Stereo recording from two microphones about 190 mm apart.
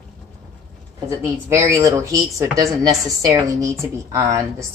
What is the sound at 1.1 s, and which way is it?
Speech, 15° right (ahead or behind).